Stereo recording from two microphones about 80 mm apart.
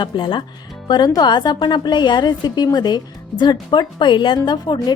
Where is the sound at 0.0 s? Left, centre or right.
Left.